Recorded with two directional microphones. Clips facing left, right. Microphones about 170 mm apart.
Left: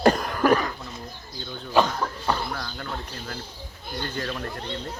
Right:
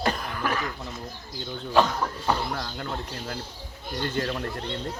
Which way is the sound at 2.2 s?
20° right (ahead or behind).